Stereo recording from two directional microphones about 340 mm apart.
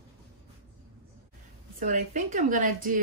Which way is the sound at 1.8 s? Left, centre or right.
Right.